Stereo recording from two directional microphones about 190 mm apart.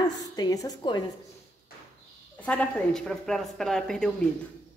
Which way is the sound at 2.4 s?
5° left (ahead or behind).